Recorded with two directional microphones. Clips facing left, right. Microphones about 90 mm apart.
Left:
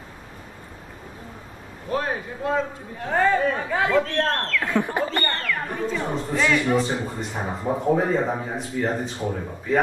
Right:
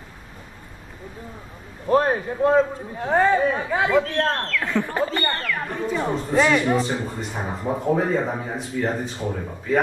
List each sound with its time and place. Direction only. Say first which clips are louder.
1.9 s speech: right 7 dB; 40° right (ahead or behind)
3.0 s a man's voice: right 2 dB; 25° right (ahead or behind); by 4.6 s centre (ahead or behind)
4.6 s speech: left 1 dB; 15° left (ahead or behind)
5.2 s speech: right 1 dB; 10° right (ahead or behind)
5.9 s speech: right 6 dB; 35° right (ahead or behind)
6.8 s speech: even; centre (ahead or behind)